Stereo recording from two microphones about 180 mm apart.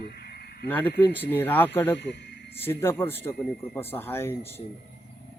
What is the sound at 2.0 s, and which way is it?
Speech, 75° left (ahead or behind).